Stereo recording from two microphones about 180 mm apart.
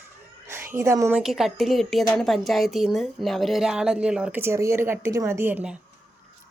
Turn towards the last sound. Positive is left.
turn(degrees=-10)  # may be behind; listen again after turning